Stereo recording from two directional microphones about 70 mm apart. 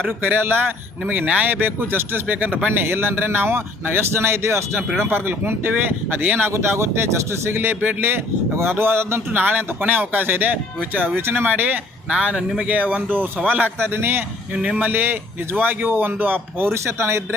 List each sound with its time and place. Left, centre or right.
0.2 s speech: right
6.5 s speech: right
16.7 s speech: right